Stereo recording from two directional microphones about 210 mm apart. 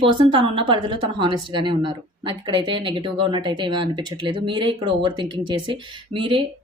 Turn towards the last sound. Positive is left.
turn(degrees=-25)  # may be behind; listen again after turning